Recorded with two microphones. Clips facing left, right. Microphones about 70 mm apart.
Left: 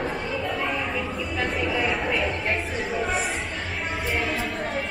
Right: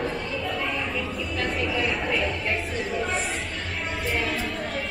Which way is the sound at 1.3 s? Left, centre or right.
Centre.